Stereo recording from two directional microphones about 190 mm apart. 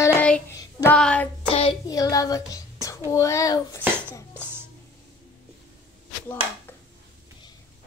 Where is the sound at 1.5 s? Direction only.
30° left (ahead or behind).